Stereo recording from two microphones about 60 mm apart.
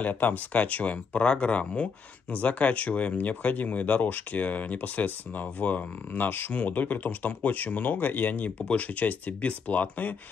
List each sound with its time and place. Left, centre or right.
0.0 s speech: left